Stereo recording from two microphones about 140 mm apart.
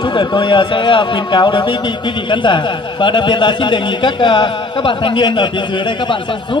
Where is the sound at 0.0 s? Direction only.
35° left (ahead or behind).